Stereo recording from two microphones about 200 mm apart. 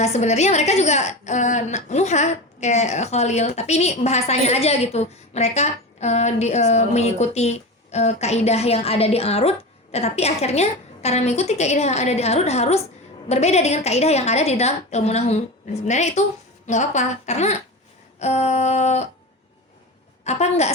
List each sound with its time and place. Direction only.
0.0 s a woman's voice: 35° left (ahead or behind)
20.2 s a woman's voice: 35° left (ahead or behind)